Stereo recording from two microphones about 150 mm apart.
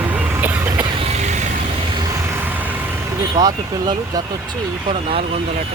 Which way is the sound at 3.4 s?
25° right (ahead or behind).